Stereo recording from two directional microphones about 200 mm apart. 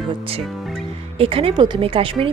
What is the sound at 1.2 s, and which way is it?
Speech, 30° right (ahead or behind).